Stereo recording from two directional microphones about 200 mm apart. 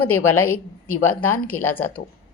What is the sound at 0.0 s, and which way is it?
A woman's voice, 90° left.